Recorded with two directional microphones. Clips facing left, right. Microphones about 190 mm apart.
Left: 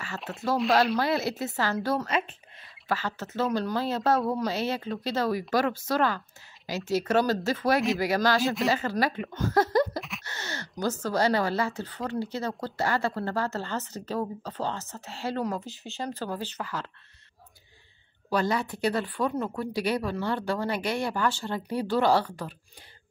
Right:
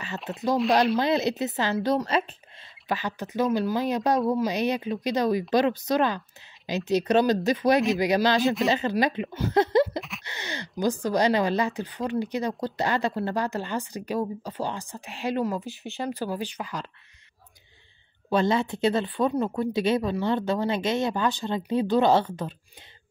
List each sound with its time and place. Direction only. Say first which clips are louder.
0.3 s speech: right 2 dB; 20° right (ahead or behind)
8.4 s speech: right 3 dB; centre (ahead or behind)
8.6 s speech: right 3 dB; 20° right (ahead or behind)
9.9 s a sound: right 2 dB; centre (ahead or behind)
10.2 s speech: right 2 dB; 15° right (ahead or behind)
18.3 s speech: right 4 dB; 25° right (ahead or behind)